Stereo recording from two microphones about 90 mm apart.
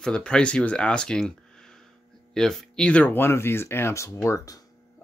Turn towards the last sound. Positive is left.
turn(degrees=35)  # may be behind; listen again after turning